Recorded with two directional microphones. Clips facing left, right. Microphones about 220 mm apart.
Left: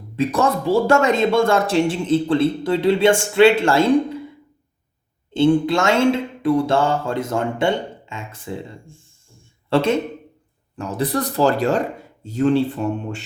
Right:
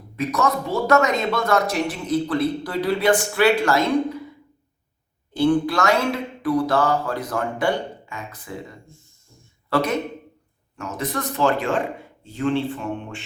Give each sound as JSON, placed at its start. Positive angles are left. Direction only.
{"t": 0.2, "sound": "a man's voice", "side_deg": 30}
{"t": 5.3, "sound": "a man's voice", "side_deg": 25}